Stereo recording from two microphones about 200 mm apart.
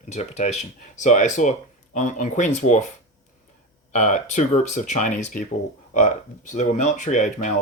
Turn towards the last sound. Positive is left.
turn(degrees=40)  # may be behind; listen again after turning